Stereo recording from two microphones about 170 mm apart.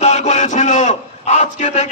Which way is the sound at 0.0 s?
45° left (ahead or behind).